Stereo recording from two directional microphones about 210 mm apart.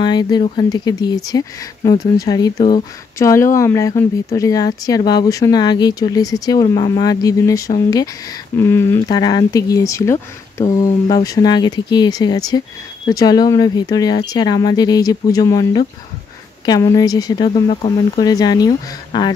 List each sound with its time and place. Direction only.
0.0 s speech: 20° left (ahead or behind)
3.2 s speech: 15° left (ahead or behind)